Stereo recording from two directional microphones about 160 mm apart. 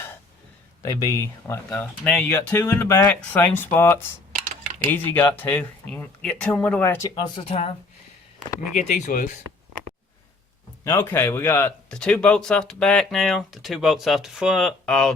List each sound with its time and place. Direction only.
0.8 s speech: 25° left (ahead or behind)
3.1 s speech: 5° left (ahead or behind)
5.1 s speech: 10° left (ahead or behind)
7.2 s speech: 35° left (ahead or behind)
8.9 s speech: 60° left (ahead or behind)
10.8 s speech: 15° left (ahead or behind)